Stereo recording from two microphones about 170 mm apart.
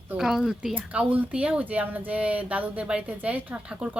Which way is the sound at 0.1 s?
5° right (ahead or behind).